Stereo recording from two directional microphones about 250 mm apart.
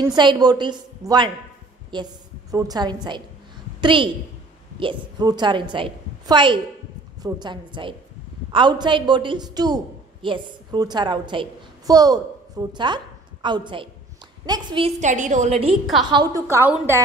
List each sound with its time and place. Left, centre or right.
0.0 s a woman's voice: centre
16.1 s a woman's voice: centre